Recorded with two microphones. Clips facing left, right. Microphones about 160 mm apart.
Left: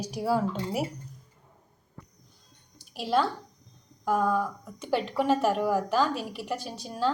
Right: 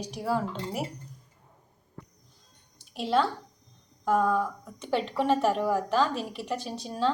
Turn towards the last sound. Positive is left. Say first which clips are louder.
# right 1 dB
turn(degrees=0)  # may be behind; listen again after turning